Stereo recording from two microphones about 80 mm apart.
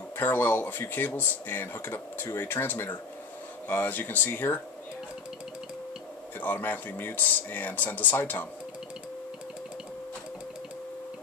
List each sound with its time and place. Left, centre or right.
0.2 s speech: left
6.4 s speech: left